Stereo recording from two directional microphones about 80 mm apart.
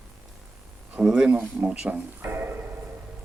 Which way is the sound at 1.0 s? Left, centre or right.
Centre.